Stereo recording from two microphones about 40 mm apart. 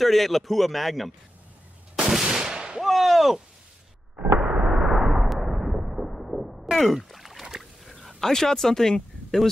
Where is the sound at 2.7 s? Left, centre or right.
Centre.